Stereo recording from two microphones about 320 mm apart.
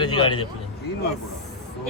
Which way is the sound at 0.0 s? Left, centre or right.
Centre.